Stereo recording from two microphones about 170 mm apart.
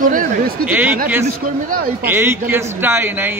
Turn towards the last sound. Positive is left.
turn(degrees=-10)  # may be behind; listen again after turning